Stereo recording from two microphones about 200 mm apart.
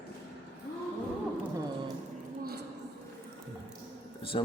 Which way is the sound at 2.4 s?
55° right (ahead or behind).